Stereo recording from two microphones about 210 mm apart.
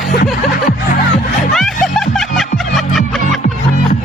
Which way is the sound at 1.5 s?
Centre (ahead or behind).